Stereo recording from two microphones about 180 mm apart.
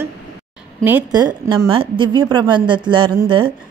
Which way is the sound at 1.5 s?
30° right (ahead or behind).